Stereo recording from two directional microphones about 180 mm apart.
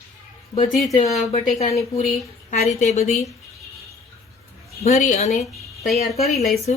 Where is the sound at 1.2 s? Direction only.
40° left (ahead or behind).